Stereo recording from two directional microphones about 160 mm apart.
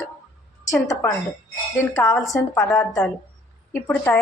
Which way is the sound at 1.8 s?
20° left (ahead or behind).